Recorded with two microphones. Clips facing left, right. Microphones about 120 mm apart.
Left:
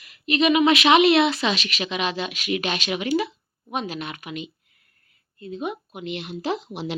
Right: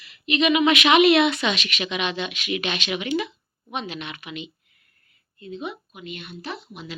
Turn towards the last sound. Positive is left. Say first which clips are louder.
# left 8 dB
turn(degrees=85)